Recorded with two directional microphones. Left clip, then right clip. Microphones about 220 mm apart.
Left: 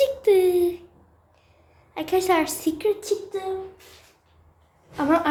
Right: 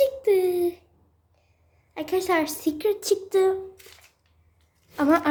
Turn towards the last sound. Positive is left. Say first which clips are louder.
# even
turn(degrees=-35)  # may be behind; listen again after turning